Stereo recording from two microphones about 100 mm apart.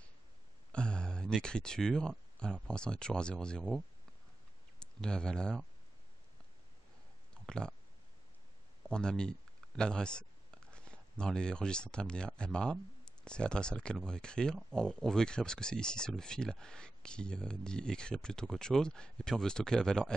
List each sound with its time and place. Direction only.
0.7 s speech: 10° left (ahead or behind)
7.4 s speech: 10° left (ahead or behind)
8.9 s speech: 10° left (ahead or behind)